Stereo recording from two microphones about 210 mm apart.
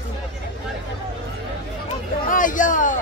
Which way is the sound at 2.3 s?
40° left (ahead or behind).